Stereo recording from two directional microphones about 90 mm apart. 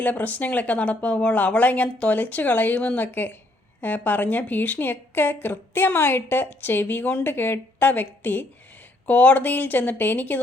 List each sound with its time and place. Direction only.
0.0 s a woman's voice: 20° left (ahead or behind)